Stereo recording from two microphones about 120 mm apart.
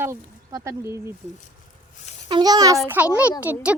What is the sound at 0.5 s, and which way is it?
Speech, 25° right (ahead or behind).